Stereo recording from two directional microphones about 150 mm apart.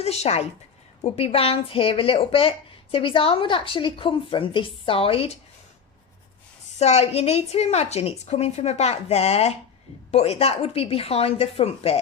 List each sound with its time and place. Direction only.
0.0 s a woman's voice: 45° left (ahead or behind)
6.7 s a woman's voice: 45° left (ahead or behind)